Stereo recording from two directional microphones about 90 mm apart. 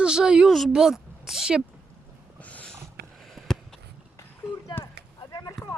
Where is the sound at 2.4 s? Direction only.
15° left (ahead or behind).